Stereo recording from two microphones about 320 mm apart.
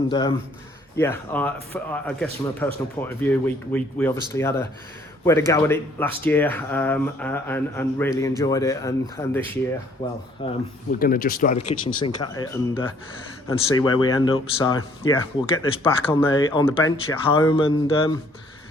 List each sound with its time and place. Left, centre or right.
0.1 s speech: centre